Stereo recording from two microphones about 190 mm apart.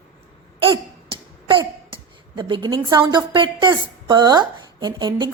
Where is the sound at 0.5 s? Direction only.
25° right (ahead or behind).